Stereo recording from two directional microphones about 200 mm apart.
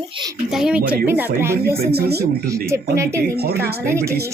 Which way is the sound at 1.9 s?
55° right (ahead or behind).